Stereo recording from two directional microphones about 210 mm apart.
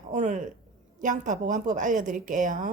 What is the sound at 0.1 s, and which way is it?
Speech, 35° right (ahead or behind).